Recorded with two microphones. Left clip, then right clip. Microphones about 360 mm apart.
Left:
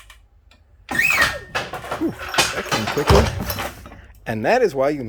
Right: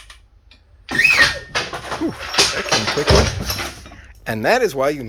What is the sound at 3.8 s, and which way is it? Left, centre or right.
Speech, centre.